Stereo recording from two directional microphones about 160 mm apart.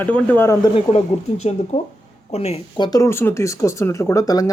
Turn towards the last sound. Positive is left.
turn(degrees=25)  # may be behind; listen again after turning